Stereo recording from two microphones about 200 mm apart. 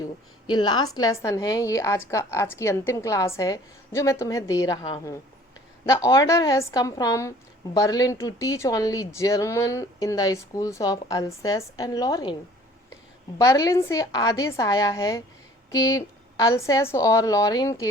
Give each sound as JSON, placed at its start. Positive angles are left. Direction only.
{"t": 0.0, "sound": "a woman's voice", "side_deg": 20}
{"t": 13.4, "sound": "a woman's voice", "side_deg": 15}